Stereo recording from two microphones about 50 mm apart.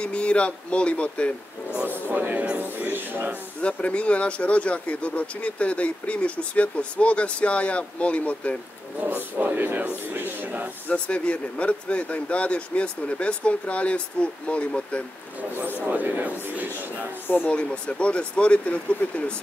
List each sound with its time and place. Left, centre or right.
0.0 s speech: left
1.9 s speech: right
3.6 s speech: left
9.0 s speech: right
10.9 s speech: left
15.9 s speech: right
17.5 s speech: left